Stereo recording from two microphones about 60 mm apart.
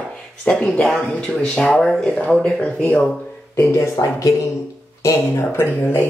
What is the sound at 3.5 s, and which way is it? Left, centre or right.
Speech, left.